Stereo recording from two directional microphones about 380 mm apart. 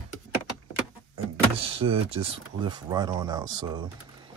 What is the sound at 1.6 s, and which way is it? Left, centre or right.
Speech, centre.